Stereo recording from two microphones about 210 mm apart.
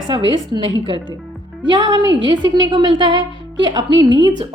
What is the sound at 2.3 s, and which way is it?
A woman's voice, 20° right (ahead or behind).